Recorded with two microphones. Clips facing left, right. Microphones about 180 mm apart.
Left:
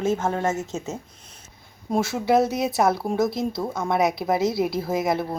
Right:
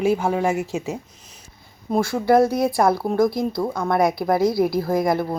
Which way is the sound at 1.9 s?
Centre (ahead or behind).